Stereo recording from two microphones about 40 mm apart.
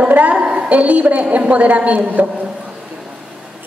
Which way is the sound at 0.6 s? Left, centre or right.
Right.